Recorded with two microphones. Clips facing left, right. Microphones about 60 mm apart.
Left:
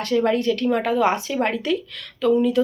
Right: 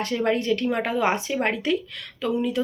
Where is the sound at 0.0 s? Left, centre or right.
Right.